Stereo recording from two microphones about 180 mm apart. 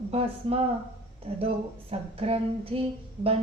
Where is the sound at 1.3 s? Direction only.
35° right (ahead or behind).